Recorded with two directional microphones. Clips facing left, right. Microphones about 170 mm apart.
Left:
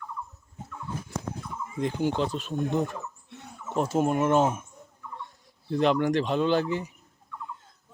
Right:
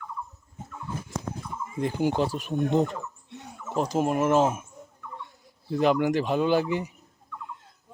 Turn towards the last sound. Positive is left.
turn(degrees=-10)  # may be behind; listen again after turning